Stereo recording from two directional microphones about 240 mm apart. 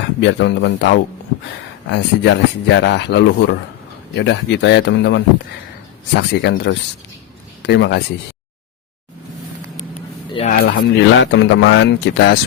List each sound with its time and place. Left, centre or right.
0.2 s speech: left
10.3 s speech: left
10.7 s speech: left